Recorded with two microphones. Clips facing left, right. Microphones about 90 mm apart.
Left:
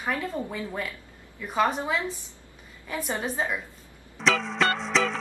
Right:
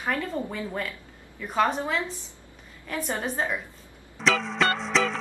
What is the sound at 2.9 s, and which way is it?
Speech, 10° left (ahead or behind).